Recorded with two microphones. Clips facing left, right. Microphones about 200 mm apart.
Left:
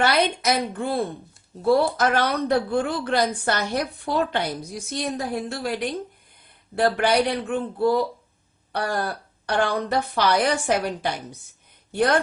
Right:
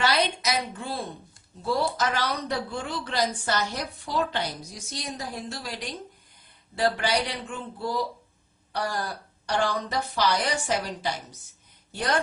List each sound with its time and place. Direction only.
0.0 s speech: 55° left (ahead or behind)